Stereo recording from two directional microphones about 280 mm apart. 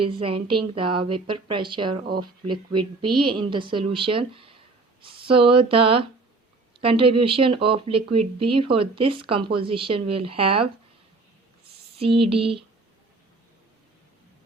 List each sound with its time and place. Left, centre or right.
0.0 s a woman's voice: centre
11.9 s speech: centre